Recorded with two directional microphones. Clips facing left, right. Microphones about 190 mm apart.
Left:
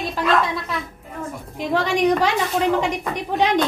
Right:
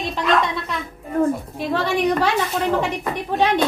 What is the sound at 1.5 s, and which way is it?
Speech, 15° left (ahead or behind).